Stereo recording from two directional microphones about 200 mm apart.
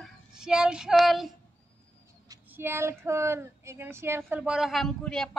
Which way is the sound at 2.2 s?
15° right (ahead or behind).